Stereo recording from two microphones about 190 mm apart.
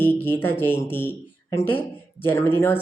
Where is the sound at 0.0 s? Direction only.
10° left (ahead or behind).